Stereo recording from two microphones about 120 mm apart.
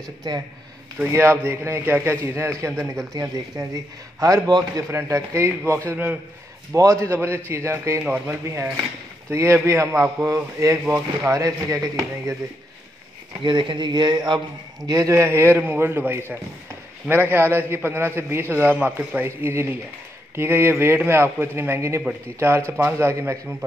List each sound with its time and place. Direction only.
0.9 s a man's voice: 20° right (ahead or behind)
6.7 s a man's voice: 25° right (ahead or behind)
13.4 s a man's voice: 40° right (ahead or behind); by 23.4 s 20° right (ahead or behind)